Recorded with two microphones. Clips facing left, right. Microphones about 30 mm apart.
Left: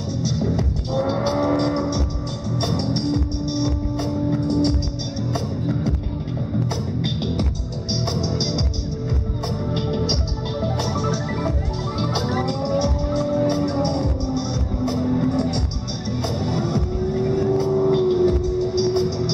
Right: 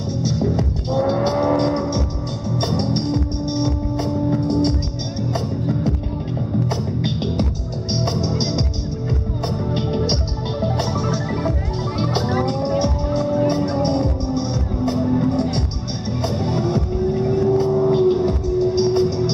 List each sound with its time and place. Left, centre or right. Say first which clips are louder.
0.4 s music: right 2 dB; centre
7.0 s music: right 1 dB; centre
10.6 s music: right 3 dB; centre
12.0 s music: right 3 dB; centre
15.3 s music: right 1 dB; centre